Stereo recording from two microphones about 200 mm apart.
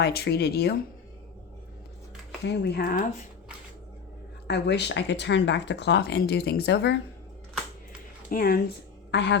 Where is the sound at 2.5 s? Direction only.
55° left (ahead or behind).